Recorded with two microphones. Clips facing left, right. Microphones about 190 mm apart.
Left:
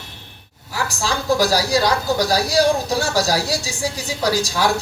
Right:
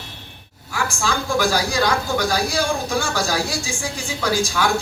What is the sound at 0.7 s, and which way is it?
A man's voice, 40° left (ahead or behind).